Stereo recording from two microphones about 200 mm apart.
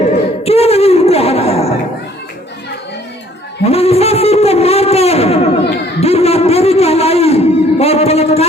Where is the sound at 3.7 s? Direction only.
30° left (ahead or behind).